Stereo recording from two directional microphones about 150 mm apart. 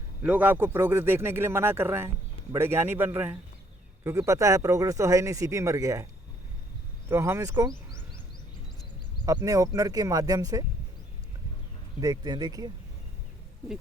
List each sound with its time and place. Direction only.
0.2 s speech: 10° right (ahead or behind)
7.1 s speech: 15° right (ahead or behind)
9.2 s speech: 25° right (ahead or behind)
11.9 s speech: 25° right (ahead or behind)